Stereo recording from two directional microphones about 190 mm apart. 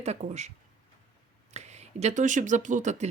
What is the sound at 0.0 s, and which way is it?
Speech, 35° right (ahead or behind).